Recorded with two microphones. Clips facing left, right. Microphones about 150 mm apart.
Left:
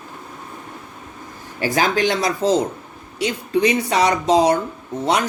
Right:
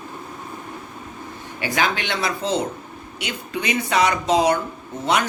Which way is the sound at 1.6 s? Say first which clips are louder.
Left 5 dB; 40° left (ahead or behind).